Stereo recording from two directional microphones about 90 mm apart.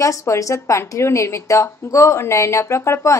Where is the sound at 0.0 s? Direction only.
35° left (ahead or behind).